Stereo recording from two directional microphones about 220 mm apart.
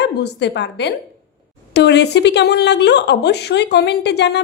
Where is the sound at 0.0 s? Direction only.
50° left (ahead or behind).